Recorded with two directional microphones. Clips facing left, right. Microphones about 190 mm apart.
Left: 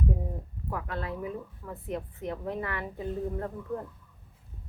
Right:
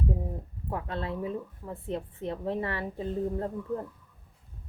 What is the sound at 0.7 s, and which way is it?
A woman's voice, 25° right (ahead or behind).